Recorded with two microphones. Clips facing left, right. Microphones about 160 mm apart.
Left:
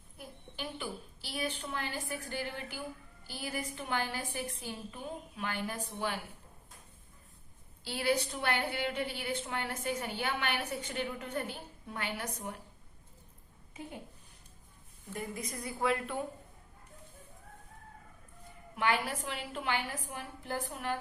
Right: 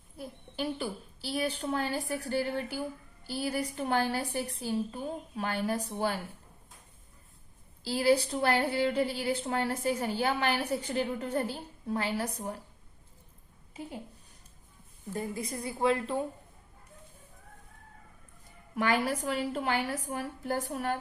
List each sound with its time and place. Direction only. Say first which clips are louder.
0.2 s a sound: right 7 dB; 35° right (ahead or behind)
3.2 s a woman's voice: right 7 dB; 35° right (ahead or behind)
7.9 s a woman's voice: right 6 dB; 35° right (ahead or behind)
15.1 s a woman's voice: right 5 dB; 30° right (ahead or behind)
18.8 s a woman's voice: right 4 dB; 40° right (ahead or behind)